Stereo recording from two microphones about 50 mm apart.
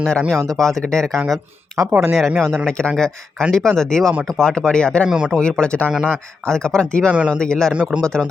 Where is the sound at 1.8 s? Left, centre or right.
Right.